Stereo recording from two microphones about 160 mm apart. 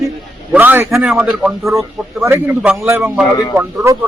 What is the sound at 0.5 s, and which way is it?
Speech, 10° right (ahead or behind).